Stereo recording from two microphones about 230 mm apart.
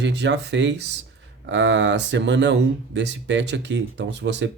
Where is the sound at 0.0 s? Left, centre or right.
Right.